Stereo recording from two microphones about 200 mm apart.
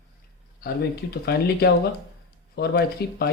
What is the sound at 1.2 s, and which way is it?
Speech, 55° left (ahead or behind).